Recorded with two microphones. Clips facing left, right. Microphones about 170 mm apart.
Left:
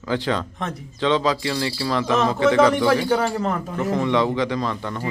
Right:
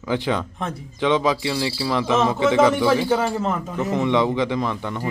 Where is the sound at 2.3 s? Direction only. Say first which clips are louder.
Left 2 dB; 20° right (ahead or behind).